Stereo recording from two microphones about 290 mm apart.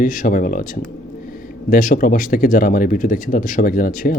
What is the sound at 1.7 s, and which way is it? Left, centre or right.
Speech, left.